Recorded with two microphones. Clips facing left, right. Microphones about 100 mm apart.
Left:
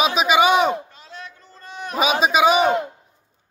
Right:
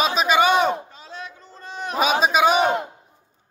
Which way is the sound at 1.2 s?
20° right (ahead or behind).